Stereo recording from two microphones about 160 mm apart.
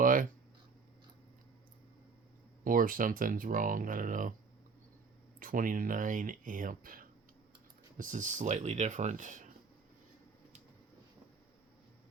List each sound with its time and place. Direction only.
0.0 s a sound: 60° right (ahead or behind)
2.6 s speech: 60° right (ahead or behind)
5.4 s speech: 60° right (ahead or behind)